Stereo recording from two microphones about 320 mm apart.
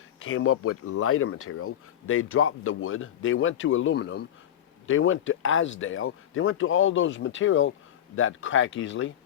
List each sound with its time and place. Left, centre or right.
0.2 s speech: left